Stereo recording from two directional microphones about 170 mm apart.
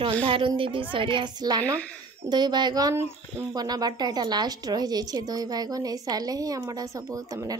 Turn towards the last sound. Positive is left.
turn(degrees=-20)  # may be behind; listen again after turning